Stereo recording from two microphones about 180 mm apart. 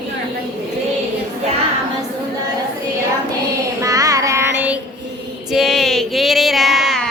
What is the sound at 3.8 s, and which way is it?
Child singing, 20° right (ahead or behind).